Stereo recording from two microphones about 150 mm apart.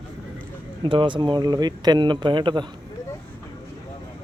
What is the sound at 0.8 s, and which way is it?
Speech, 35° right (ahead or behind).